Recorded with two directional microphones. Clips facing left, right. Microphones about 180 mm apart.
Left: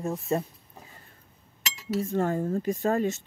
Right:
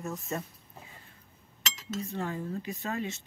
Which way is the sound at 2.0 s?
45° left (ahead or behind).